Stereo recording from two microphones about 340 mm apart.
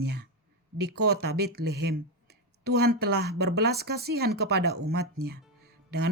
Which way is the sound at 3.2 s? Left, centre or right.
Right.